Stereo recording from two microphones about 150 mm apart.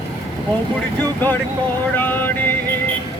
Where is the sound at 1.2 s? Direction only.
10° left (ahead or behind).